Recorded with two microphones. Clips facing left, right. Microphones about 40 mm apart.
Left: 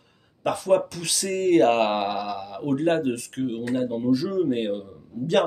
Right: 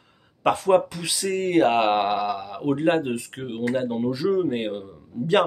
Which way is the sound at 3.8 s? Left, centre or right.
Right.